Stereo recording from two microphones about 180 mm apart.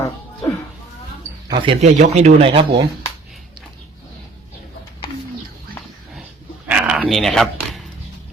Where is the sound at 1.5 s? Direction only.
30° right (ahead or behind).